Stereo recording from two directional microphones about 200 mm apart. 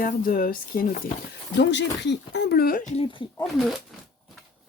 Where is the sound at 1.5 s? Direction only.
60° left (ahead or behind).